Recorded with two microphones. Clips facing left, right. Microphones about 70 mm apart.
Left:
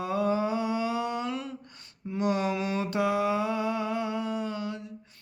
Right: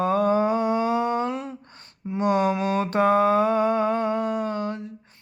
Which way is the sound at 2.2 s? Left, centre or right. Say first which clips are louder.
Right 6 dB; right.